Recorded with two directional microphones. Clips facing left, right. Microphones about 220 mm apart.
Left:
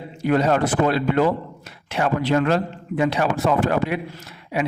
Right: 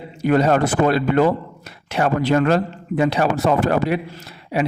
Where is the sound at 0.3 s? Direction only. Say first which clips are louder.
Right 2 dB; 45° right (ahead or behind).